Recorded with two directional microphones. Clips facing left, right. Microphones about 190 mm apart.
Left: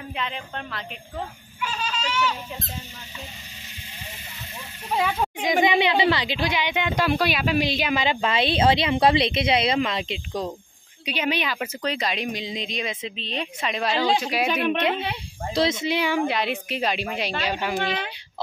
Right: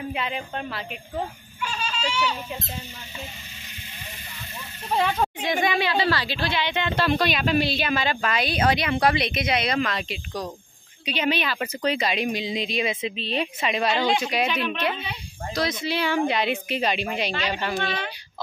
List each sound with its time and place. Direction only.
0.1 s a woman's voice: 10° right (ahead or behind)
2.0 s speech: 10° right (ahead or behind)
4.9 s speech: 5° left (ahead or behind)
5.6 s a woman's voice: 20° left (ahead or behind)
11.1 s speech: 10° left (ahead or behind)
11.6 s speech: 5° right (ahead or behind)
14.5 s speech: 55° left (ahead or behind)
15.5 s a woman's voice: 25° left (ahead or behind)
16.2 s speech: centre (ahead or behind)